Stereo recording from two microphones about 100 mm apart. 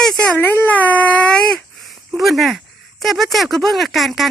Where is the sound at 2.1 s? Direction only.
Centre (ahead or behind).